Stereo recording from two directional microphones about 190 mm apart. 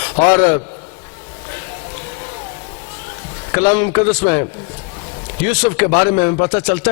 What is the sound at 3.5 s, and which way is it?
Speech, 15° left (ahead or behind).